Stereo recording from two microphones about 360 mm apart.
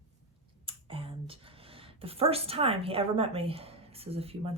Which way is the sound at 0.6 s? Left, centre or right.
Centre.